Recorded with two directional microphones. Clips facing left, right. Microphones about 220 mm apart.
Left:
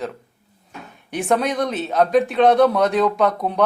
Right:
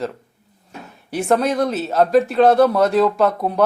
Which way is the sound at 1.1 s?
Centre (ahead or behind).